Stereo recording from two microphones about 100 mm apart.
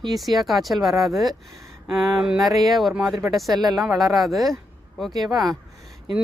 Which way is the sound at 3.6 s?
40° right (ahead or behind).